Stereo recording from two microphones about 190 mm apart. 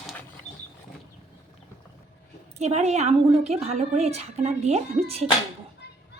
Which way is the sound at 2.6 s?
35° right (ahead or behind).